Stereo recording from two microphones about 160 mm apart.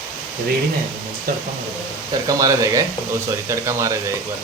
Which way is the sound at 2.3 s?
20° right (ahead or behind).